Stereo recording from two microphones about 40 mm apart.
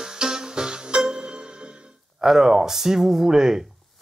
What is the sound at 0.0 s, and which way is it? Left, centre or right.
Music, centre.